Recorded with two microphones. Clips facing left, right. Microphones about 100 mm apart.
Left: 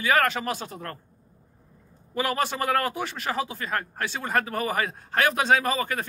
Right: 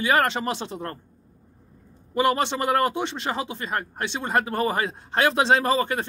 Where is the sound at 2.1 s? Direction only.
25° right (ahead or behind).